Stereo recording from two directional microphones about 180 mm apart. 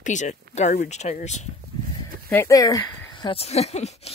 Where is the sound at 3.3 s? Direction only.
35° left (ahead or behind).